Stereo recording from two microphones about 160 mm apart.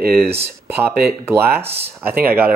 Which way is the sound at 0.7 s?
15° right (ahead or behind).